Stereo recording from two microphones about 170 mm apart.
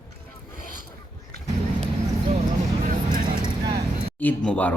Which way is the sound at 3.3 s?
25° right (ahead or behind).